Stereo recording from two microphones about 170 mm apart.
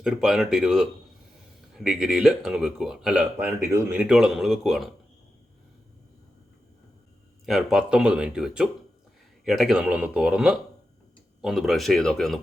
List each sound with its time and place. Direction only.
0.0 s speech: 5° right (ahead or behind)
3.3 s speech: 15° right (ahead or behind)
4.0 s speech: centre (ahead or behind)
7.4 s speech: centre (ahead or behind)